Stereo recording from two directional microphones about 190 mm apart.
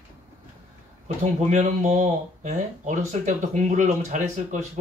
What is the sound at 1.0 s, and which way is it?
Speech, 40° right (ahead or behind).